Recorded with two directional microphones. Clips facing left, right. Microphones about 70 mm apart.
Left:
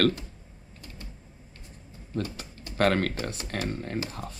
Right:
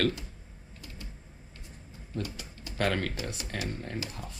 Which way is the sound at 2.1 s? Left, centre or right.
Left.